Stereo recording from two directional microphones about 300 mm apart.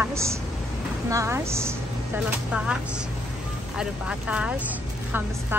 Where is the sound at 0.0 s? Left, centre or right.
Centre.